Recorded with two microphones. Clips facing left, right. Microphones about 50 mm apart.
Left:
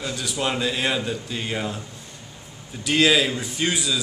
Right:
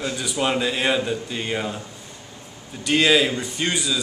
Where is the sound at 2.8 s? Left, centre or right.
Centre.